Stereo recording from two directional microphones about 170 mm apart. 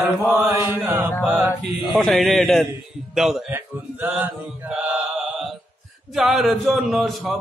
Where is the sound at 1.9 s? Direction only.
Centre (ahead or behind).